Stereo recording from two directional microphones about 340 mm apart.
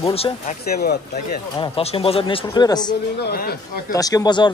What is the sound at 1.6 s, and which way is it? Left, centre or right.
Speech, centre.